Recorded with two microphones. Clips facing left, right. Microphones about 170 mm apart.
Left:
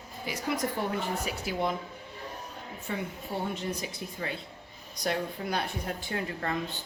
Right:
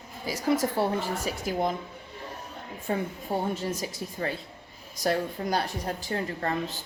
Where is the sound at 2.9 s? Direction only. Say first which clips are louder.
Right 6 dB; 40° right (ahead or behind).